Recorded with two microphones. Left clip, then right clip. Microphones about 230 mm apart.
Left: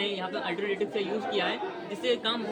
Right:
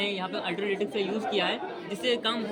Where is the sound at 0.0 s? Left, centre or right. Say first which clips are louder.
Right 1 dB; right.